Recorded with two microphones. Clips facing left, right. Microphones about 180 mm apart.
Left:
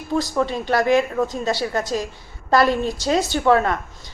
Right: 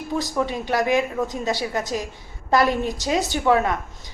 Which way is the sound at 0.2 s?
15° right (ahead or behind).